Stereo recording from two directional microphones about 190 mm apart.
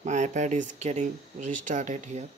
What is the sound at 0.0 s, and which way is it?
Speech, 40° right (ahead or behind).